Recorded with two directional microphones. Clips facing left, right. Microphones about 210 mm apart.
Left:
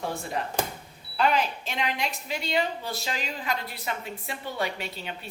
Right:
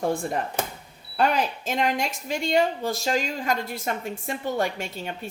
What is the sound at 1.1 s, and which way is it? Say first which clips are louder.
A woman's voice: right 2 dB; 45° right (ahead or behind).